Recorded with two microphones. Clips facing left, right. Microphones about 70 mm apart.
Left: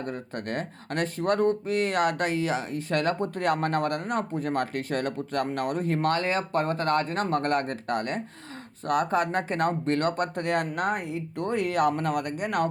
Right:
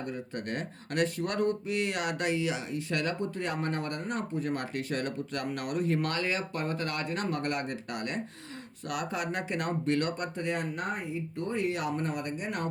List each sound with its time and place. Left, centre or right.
0.1 s speech: left